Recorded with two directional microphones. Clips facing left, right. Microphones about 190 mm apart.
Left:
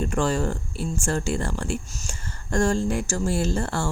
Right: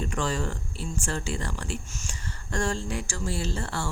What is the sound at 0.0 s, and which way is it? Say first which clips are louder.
Speech: left 6 dB; 50° left (ahead or behind).